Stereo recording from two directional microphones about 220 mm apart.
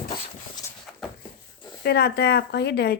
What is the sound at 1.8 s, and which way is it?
Speech, 45° left (ahead or behind).